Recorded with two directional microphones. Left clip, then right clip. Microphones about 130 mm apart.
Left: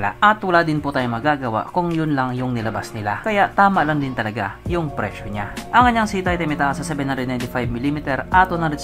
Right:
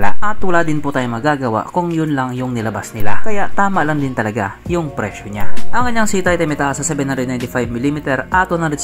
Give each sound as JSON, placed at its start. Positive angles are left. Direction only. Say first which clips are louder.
{"t": 0.0, "sound": "speech", "louder": "left 2 dB", "side_deg": -30}
{"t": 6.6, "sound": "speech", "louder": "right 3 dB", "side_deg": -45}